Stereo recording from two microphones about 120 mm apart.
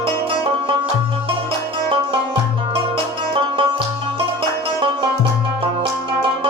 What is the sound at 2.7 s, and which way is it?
Music, 45° right (ahead or behind).